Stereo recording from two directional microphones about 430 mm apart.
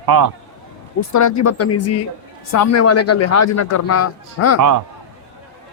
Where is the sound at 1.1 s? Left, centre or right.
Left.